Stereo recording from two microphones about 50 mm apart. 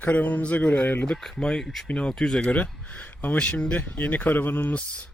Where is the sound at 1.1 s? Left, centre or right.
Centre.